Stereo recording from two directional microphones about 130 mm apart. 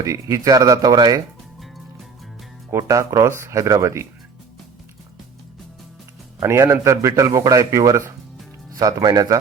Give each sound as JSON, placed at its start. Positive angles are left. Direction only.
{"t": 0.0, "sound": "a man's voice", "side_deg": -25}
{"t": 2.7, "sound": "a man's voice", "side_deg": -25}
{"t": 6.4, "sound": "a man's voice", "side_deg": -20}